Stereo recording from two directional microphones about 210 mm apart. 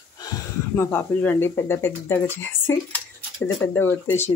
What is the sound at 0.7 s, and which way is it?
Speech, 10° left (ahead or behind).